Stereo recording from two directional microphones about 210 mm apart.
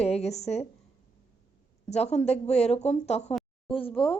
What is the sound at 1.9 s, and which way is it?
Speech, 30° left (ahead or behind).